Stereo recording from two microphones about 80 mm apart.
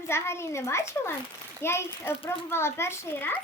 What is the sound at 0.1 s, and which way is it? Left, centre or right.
A child's voice, left.